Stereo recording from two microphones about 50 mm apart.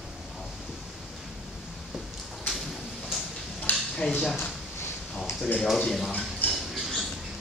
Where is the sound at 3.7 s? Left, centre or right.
Left.